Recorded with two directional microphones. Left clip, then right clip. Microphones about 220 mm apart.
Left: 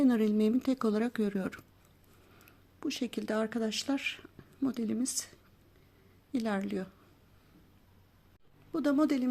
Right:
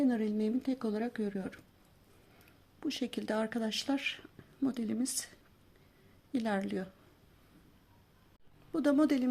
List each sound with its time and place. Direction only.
0.0 s speech: 25° left (ahead or behind)
2.8 s speech: 10° left (ahead or behind)
8.7 s speech: 5° left (ahead or behind)